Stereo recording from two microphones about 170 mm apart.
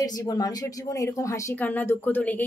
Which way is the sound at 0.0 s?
20° left (ahead or behind).